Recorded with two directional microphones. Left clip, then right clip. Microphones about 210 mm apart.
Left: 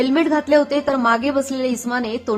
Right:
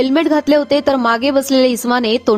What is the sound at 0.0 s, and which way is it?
A woman's voice, 45° right (ahead or behind).